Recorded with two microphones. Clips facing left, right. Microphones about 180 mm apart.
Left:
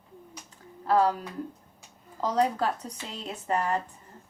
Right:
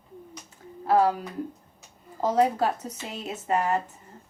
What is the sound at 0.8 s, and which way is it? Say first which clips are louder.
Speech: right 2 dB; 25° right (ahead or behind).